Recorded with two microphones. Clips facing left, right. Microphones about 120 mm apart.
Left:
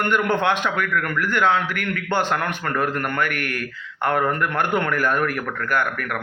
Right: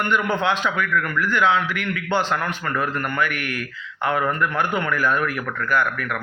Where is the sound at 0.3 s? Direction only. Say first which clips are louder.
Left 1 dB; 55° left (ahead or behind).